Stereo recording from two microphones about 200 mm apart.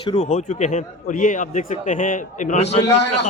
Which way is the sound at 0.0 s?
25° left (ahead or behind).